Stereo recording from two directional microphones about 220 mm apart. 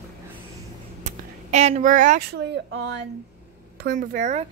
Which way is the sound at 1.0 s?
30° right (ahead or behind).